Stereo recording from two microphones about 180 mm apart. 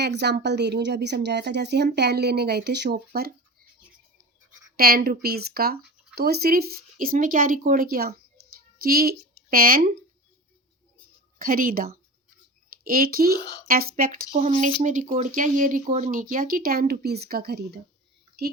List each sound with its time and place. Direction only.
0.0 s a woman's voice: 65° right (ahead or behind)
4.8 s speech: 55° right (ahead or behind)
8.5 s a sound: 55° right (ahead or behind)
11.3 s speech: 50° right (ahead or behind)
13.4 s a child's voice: 20° left (ahead or behind)
13.7 s speech: 50° right (ahead or behind)